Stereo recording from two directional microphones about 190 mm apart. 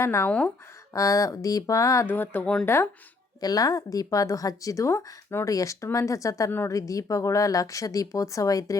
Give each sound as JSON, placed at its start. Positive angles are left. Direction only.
{"t": 0.0, "sound": "speech", "side_deg": 15}